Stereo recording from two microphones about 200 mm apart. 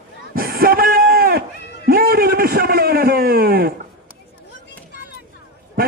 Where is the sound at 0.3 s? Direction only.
50° right (ahead or behind).